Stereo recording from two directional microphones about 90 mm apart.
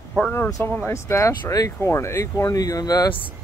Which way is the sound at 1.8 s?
30° left (ahead or behind).